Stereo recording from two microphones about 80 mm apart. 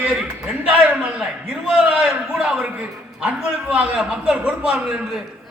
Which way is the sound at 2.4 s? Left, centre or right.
Centre.